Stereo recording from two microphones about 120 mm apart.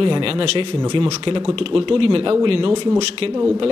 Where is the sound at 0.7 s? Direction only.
35° right (ahead or behind).